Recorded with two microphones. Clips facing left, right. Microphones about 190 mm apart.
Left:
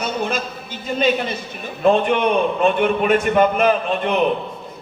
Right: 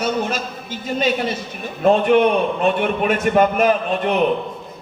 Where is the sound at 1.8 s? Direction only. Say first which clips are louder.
Right 2 dB; 45° right (ahead or behind).